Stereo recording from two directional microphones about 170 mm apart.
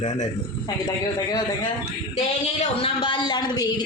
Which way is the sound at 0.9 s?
25° left (ahead or behind).